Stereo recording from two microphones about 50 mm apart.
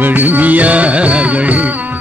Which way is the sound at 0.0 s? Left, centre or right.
Right.